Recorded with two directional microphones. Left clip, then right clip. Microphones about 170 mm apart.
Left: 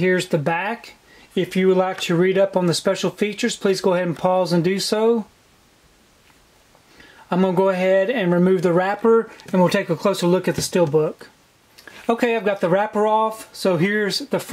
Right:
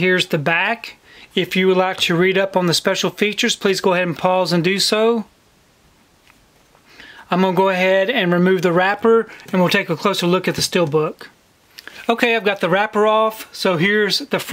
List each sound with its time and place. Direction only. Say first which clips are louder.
0.0 s speech: right 3 dB; 20° right (ahead or behind)
7.0 s speech: right 3 dB; 20° right (ahead or behind)